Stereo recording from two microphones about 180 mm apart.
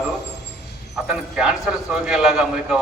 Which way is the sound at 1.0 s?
5° right (ahead or behind).